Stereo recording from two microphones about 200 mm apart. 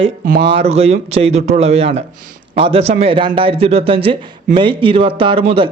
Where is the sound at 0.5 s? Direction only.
30° right (ahead or behind).